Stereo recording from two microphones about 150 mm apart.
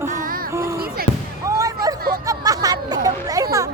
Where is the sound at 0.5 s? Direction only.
20° right (ahead or behind).